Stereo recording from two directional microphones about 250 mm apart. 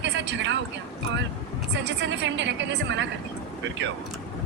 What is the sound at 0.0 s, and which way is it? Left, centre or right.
Vehicle, right.